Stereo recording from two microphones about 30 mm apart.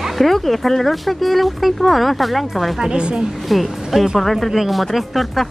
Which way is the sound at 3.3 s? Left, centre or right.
Centre.